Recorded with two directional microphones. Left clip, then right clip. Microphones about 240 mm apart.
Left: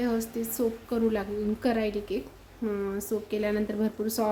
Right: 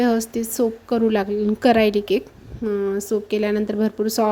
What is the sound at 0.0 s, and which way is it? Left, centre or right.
A woman's voice, right.